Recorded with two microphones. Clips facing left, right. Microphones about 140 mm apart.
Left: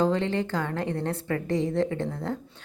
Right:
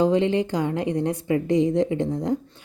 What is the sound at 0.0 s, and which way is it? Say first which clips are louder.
A woman's voice: right 5 dB; 15° right (ahead or behind).